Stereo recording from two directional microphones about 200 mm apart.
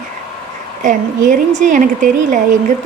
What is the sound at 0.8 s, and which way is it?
A woman's voice, 40° right (ahead or behind).